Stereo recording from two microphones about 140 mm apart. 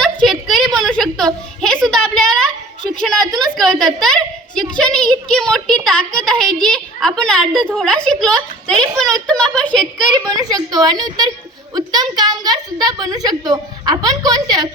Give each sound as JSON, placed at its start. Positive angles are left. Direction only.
{"t": 0.0, "sound": "a sound", "side_deg": 5}
{"t": 4.8, "sound": "a woman's voice", "side_deg": 5}
{"t": 10.2, "sound": "a woman's voice", "side_deg": -25}